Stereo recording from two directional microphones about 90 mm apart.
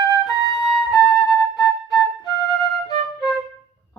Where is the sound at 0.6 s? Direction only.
Centre (ahead or behind).